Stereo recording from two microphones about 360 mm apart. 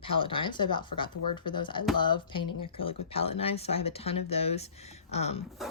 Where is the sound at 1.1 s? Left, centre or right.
Left.